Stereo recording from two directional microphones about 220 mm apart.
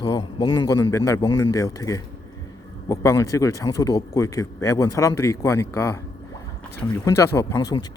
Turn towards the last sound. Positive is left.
turn(degrees=15)  # may be behind; listen again after turning